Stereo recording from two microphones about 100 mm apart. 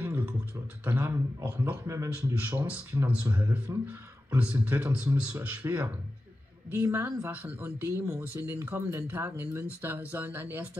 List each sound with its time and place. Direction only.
0.0 s beatboxing: 15° right (ahead or behind)
0.8 s speech: 20° right (ahead or behind)